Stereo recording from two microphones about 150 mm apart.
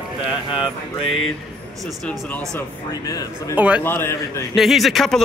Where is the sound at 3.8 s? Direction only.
15° left (ahead or behind).